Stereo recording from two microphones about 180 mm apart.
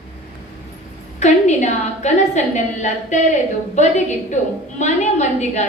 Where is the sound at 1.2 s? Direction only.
40° left (ahead or behind).